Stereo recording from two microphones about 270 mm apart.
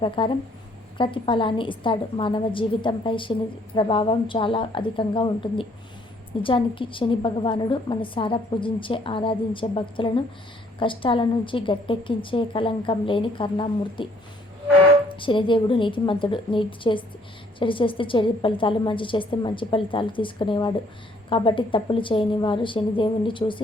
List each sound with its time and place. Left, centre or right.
0.0 s a woman's voice: centre
15.1 s a woman's voice: centre